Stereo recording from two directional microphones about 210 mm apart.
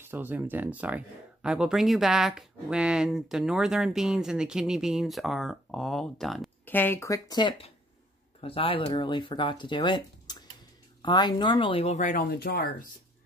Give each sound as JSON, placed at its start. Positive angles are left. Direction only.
{"t": 0.0, "sound": "speech", "side_deg": -10}